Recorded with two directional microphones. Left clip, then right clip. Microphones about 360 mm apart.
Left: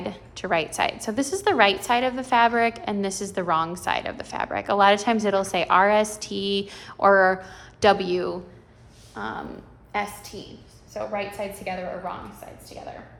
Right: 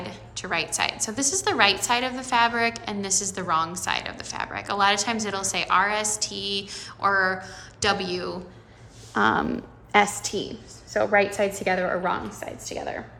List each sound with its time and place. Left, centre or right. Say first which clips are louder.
0.0 s a sound: left 3 dB; centre
0.9 s a woman's voice: even; centre
9.1 s a woman's voice: right 11 dB; right